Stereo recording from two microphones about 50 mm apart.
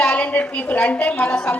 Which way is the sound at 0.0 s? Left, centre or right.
Left.